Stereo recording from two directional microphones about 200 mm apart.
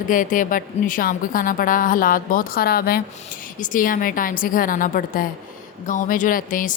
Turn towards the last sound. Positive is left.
turn(degrees=40)  # may be behind; listen again after turning